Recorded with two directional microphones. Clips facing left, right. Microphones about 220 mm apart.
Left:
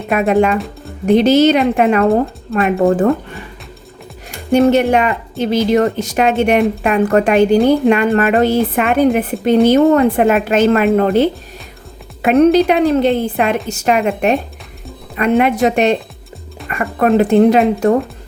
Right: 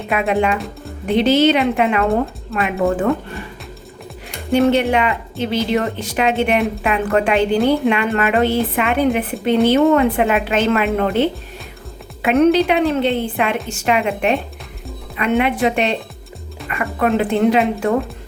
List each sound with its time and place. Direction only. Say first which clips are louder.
0.1 s a woman's voice: left 5 dB; 45° left (ahead or behind)
2.7 s a woman's voice: left 5 dB; 35° left (ahead or behind)
4.7 s a woman's voice: left 4 dB; 45° left (ahead or behind)